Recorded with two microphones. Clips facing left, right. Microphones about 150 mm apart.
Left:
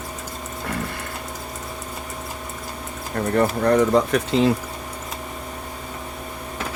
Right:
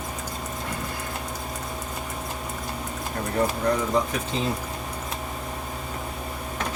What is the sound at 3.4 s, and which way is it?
Speech, 65° left (ahead or behind).